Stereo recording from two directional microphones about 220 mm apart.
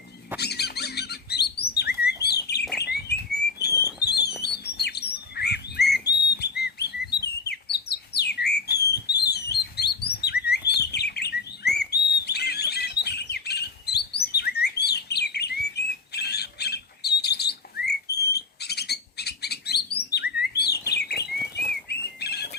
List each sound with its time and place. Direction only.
0.3 s rodents: 50° left (ahead or behind)
2.2 s bird: 50° left (ahead or behind)
4.0 s alarm: 50° left (ahead or behind)
4.4 s bird: 45° left (ahead or behind)
20.8 s chirp: 50° left (ahead or behind)
21.8 s bird: 50° left (ahead or behind)